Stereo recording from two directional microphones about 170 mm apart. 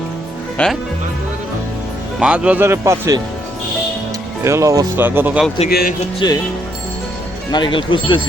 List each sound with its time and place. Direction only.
0.5 s speech: 5° left (ahead or behind)
2.1 s a man's voice: 5° right (ahead or behind)
4.4 s a man's voice: 20° right (ahead or behind)
6.1 s speech: 25° left (ahead or behind)
7.5 s speech: 30° left (ahead or behind)